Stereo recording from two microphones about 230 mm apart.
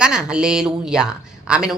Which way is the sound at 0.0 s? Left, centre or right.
Centre.